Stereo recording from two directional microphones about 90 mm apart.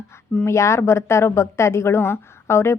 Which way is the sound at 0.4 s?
35° left (ahead or behind).